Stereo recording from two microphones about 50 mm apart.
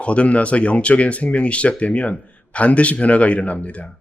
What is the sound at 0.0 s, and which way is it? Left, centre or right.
Speech, left.